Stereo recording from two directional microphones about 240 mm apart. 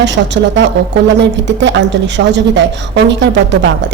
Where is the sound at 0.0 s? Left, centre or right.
Right.